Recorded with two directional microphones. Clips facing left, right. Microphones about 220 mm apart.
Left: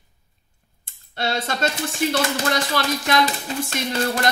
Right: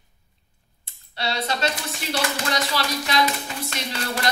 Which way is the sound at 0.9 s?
50° left (ahead or behind).